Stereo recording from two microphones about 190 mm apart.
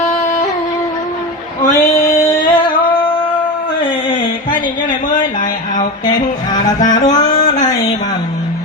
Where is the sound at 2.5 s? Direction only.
25° left (ahead or behind).